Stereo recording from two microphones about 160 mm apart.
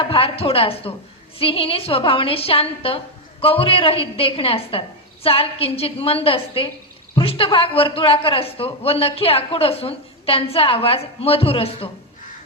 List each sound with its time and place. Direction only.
0.0 s speech: 35° left (ahead or behind)